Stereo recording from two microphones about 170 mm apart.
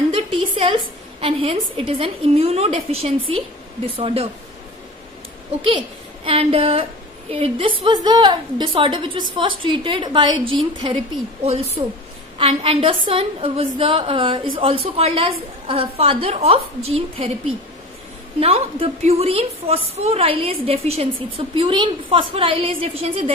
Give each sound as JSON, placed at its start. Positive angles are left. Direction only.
{"t": 0.1, "sound": "a woman's voice", "side_deg": -30}
{"t": 6.2, "sound": "a woman's voice", "side_deg": -35}
{"t": 18.4, "sound": "a woman's voice", "side_deg": -35}